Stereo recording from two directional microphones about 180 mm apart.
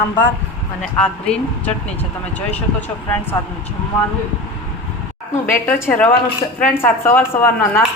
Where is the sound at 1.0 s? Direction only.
5° left (ahead or behind).